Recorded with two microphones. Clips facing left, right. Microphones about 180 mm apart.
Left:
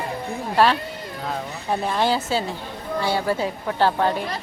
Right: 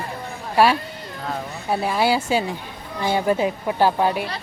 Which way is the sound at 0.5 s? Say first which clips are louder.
Right 2 dB; 10° right (ahead or behind).